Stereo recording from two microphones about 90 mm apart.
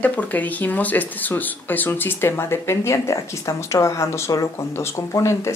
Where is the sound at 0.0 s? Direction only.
15° left (ahead or behind).